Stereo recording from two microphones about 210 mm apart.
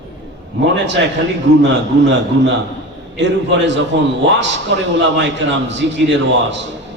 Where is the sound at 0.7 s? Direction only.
55° right (ahead or behind).